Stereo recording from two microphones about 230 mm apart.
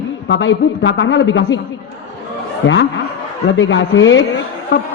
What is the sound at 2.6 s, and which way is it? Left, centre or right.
Speech, left.